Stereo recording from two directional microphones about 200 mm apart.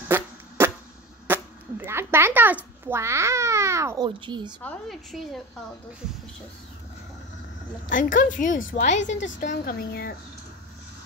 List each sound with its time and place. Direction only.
0.1 s a sound: 10° right (ahead or behind)
1.2 s a child's voice: 10° right (ahead or behind)
4.6 s a woman's voice: centre (ahead or behind)
7.9 s a woman's voice: 40° left (ahead or behind)
9.0 s a woman's voice: 65° left (ahead or behind)
9.4 s a woman's voice: 40° left (ahead or behind)